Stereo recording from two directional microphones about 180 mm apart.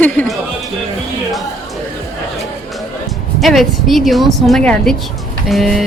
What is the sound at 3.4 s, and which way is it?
Speech, centre (ahead or behind).